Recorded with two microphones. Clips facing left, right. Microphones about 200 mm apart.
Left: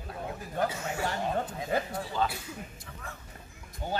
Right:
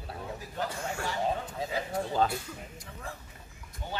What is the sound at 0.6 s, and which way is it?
Speech, 50° left (ahead or behind).